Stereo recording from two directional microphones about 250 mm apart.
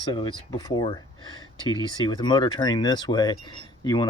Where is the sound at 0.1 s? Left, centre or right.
Centre.